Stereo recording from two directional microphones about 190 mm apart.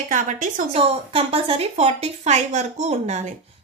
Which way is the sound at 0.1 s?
40° right (ahead or behind).